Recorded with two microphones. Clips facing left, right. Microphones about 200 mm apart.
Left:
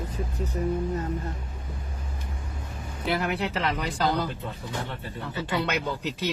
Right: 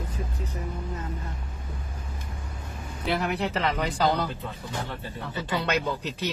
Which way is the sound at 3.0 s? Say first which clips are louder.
Even; centre (ahead or behind).